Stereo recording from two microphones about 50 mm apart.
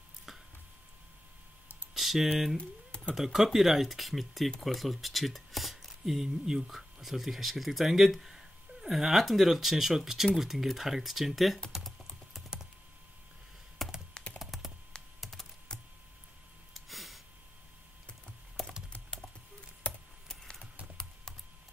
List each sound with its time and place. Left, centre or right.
2.0 s typing: centre
3.2 s speech: centre
11.8 s typing: centre
13.8 s computer keyboard: centre
14.1 s computer keyboard: left
14.4 s computer keyboard: centre
15.7 s computer keyboard: centre
16.7 s a sound: centre
18.6 s typing: centre